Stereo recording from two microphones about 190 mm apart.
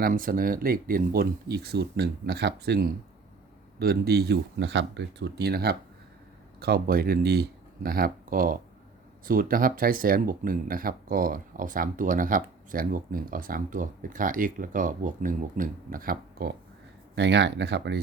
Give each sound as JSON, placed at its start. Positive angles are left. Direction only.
{"t": 0.0, "sound": "speech", "side_deg": -50}
{"t": 17.2, "sound": "speech", "side_deg": -65}